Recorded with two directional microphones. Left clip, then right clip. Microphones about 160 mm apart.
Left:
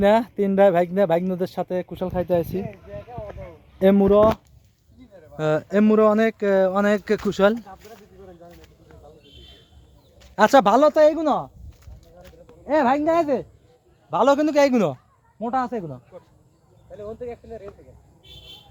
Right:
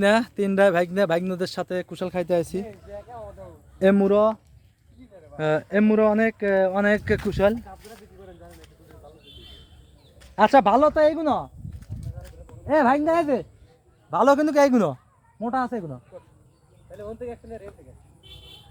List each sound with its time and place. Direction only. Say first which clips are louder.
0.0 s speech: left 2 dB; 10° right (ahead or behind)
5.4 s speech: left 1 dB; 10° left (ahead or behind)
7.2 s speech: left 2 dB; 20° left (ahead or behind)
7.6 s a sound: left 1 dB; 30° left (ahead or behind)
8.2 s a sound: left 1 dB; 15° left (ahead or behind)
10.3 s speech: left 1 dB; 20° left (ahead or behind)
12.6 s speech: even; 5° right (ahead or behind)
13.0 s speech: left 1 dB; 25° right (ahead or behind); by 16.0 s 10° right (ahead or behind)
16.9 s speech: left 2 dB; 20° right (ahead or behind)